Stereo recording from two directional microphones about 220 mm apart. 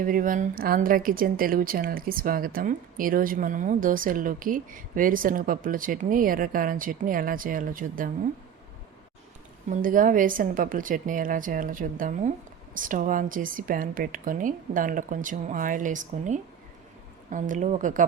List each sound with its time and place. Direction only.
0.0 s speech: 40° right (ahead or behind)
9.6 s speech: 35° right (ahead or behind)